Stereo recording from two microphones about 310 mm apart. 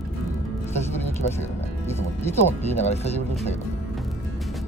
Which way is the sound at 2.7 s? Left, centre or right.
Left.